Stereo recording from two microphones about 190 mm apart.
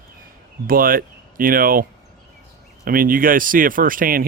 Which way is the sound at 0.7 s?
50° right (ahead or behind).